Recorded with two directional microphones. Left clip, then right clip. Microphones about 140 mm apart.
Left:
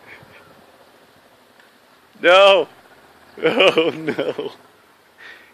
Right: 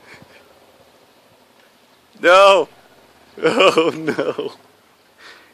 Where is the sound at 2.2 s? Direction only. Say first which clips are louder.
Right 1 dB; 30° right (ahead or behind).